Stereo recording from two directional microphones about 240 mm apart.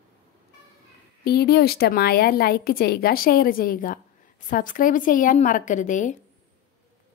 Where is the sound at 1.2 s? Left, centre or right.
Left.